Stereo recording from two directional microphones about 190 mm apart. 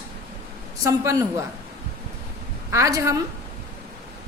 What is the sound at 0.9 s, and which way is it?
Speech, 15° right (ahead or behind).